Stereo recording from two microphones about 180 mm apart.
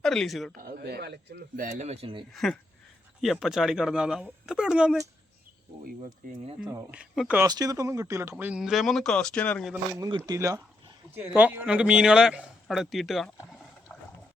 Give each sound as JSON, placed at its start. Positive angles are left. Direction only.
{"t": 0.0, "sound": "speech", "side_deg": 5}
{"t": 0.5, "sound": "speech", "side_deg": -55}
{"t": 1.8, "sound": "speech", "side_deg": -35}
{"t": 2.3, "sound": "speech", "side_deg": 0}
{"t": 6.2, "sound": "speech", "side_deg": -50}
{"t": 6.6, "sound": "speech", "side_deg": -5}
{"t": 7.4, "sound": "speech", "side_deg": -20}
{"t": 10.2, "sound": "speech", "side_deg": -15}